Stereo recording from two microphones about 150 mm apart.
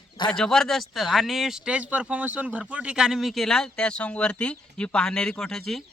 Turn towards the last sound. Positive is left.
turn(degrees=5)  # may be behind; listen again after turning